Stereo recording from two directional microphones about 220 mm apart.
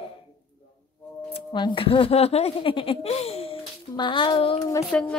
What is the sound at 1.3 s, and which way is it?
Speech, 20° left (ahead or behind).